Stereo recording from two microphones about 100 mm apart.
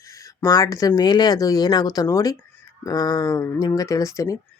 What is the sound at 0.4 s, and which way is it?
Speech, 40° left (ahead or behind).